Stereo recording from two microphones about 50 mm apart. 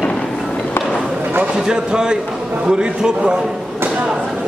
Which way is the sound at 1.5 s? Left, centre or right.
Centre.